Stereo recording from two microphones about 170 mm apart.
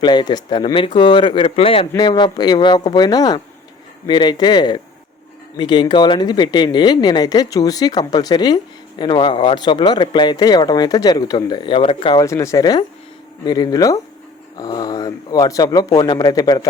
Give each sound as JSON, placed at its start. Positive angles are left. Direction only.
{"t": 0.0, "sound": "speech", "side_deg": 25}
{"t": 12.2, "sound": "speech", "side_deg": 20}